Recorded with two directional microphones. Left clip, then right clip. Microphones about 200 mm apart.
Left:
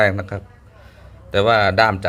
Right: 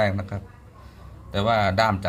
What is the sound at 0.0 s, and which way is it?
A man's voice, 35° left (ahead or behind).